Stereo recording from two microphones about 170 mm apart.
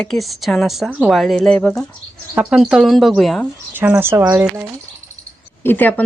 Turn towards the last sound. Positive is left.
turn(degrees=10)  # may be behind; listen again after turning